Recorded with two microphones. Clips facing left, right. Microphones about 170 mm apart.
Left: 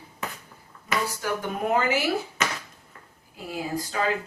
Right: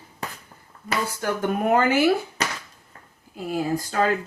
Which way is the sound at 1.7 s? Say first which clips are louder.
Right 4 dB; 55° right (ahead or behind).